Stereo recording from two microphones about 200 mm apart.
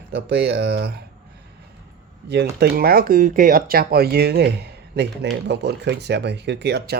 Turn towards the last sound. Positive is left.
turn(degrees=-55)  # may be behind; listen again after turning